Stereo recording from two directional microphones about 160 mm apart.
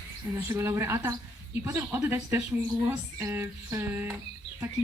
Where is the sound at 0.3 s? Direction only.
15° right (ahead or behind).